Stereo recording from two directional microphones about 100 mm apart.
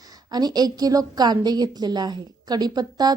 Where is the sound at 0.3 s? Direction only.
45° right (ahead or behind).